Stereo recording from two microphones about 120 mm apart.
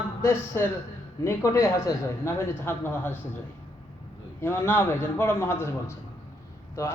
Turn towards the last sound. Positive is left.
turn(degrees=25)  # may be behind; listen again after turning